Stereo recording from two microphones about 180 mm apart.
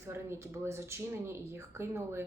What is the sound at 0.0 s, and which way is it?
A woman's voice, 15° right (ahead or behind).